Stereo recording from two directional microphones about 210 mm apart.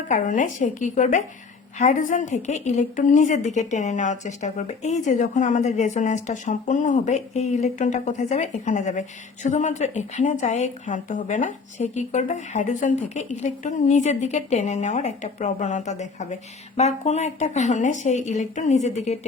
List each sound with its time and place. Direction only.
0.1 s a woman's voice: 35° left (ahead or behind)